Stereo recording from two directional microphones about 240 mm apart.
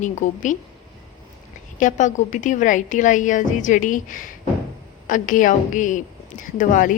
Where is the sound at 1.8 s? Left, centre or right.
Left.